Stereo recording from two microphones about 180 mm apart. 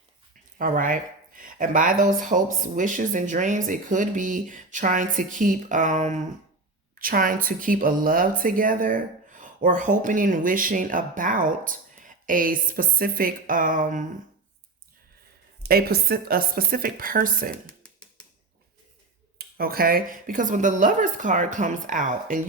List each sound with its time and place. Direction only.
0.6 s speech: 50° right (ahead or behind)
15.6 s a woman's voice: 60° right (ahead or behind)
19.4 s speech: 55° right (ahead or behind)